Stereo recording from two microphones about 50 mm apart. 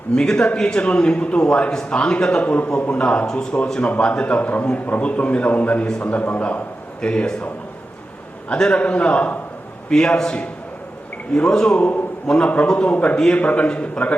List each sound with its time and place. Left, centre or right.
0.2 s a man's voice: centre
7.0 s a man's voice: centre
8.5 s a man's voice: centre
8.8 s a man's voice: left
9.9 s a man's voice: centre
11.8 s a man's voice: left